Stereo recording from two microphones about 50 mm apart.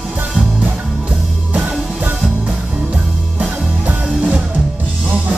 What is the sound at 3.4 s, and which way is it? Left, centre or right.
Music, right.